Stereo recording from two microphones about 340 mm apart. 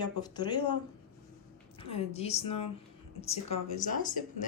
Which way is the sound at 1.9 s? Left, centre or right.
Centre.